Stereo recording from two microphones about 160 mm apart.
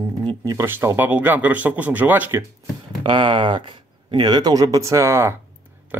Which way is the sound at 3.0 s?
30° right (ahead or behind).